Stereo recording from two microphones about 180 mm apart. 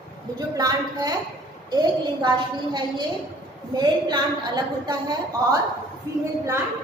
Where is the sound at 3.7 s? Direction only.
20° right (ahead or behind).